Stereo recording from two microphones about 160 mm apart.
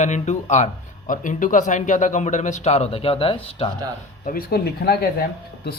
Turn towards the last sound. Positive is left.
turn(degrees=70)  # may be behind; listen again after turning